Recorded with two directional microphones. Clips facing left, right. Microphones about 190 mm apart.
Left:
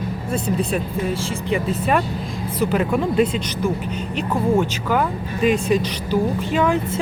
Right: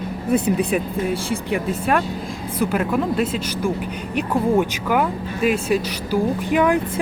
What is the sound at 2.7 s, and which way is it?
Speech, 5° right (ahead or behind).